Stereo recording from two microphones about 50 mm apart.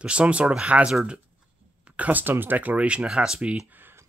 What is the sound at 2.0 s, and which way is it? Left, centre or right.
Speech, right.